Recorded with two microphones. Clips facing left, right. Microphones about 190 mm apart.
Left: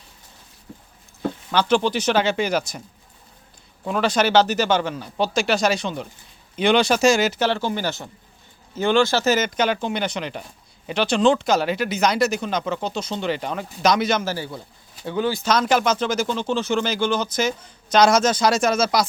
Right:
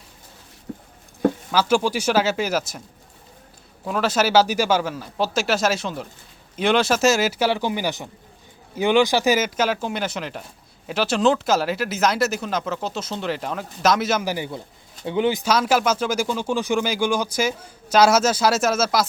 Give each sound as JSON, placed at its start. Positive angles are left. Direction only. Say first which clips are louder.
{"t": 0.7, "sound": "a sound", "louder": "right 8 dB", "side_deg": -55}
{"t": 1.5, "sound": "speech", "louder": "left 5 dB", "side_deg": -5}
{"t": 3.8, "sound": "speech", "louder": "left 1 dB", "side_deg": 0}
{"t": 15.4, "sound": "speech", "louder": "even", "side_deg": -5}